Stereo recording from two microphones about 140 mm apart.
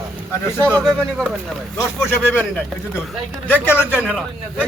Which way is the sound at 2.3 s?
15° left (ahead or behind).